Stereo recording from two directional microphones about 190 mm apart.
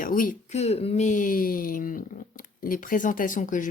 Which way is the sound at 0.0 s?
45° left (ahead or behind).